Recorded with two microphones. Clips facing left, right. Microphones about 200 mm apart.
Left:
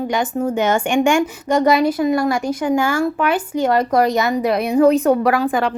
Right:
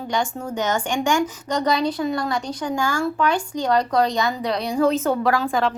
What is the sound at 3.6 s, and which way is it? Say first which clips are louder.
A woman's voice: left 4 dB; 25° left (ahead or behind).